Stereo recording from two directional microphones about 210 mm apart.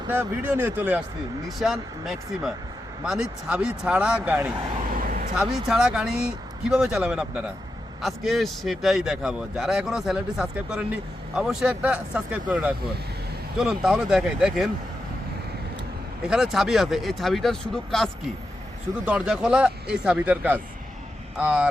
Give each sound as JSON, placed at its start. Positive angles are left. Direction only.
{"t": 0.1, "sound": "speech", "side_deg": -10}
{"t": 4.9, "sound": "vehicle", "side_deg": -40}
{"t": 5.4, "sound": "speech", "side_deg": 0}
{"t": 16.2, "sound": "speech", "side_deg": -5}